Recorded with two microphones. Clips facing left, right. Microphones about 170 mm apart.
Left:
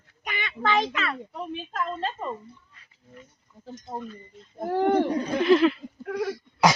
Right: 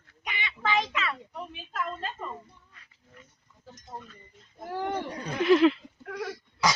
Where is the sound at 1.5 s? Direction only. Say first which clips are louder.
Left 4 dB; 35° left (ahead or behind).